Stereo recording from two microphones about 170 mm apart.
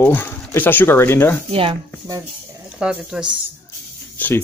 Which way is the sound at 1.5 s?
30° right (ahead or behind).